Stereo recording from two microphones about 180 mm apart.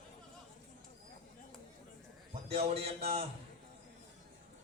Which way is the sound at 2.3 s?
35° right (ahead or behind).